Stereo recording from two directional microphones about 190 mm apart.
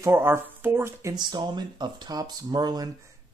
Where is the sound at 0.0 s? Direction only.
15° right (ahead or behind).